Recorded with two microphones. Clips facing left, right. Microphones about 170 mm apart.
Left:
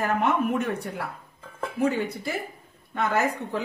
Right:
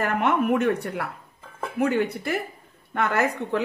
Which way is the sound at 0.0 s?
65° right (ahead or behind).